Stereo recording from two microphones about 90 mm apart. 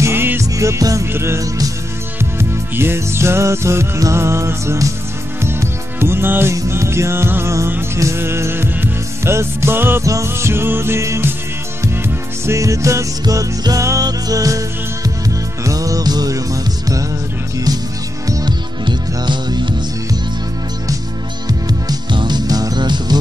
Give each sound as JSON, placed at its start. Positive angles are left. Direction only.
{"t": 0.0, "sound": "music", "side_deg": -25}
{"t": 0.5, "sound": "music", "side_deg": -35}
{"t": 12.4, "sound": "music", "side_deg": -35}
{"t": 18.9, "sound": "music", "side_deg": -60}
{"t": 21.5, "sound": "music", "side_deg": -45}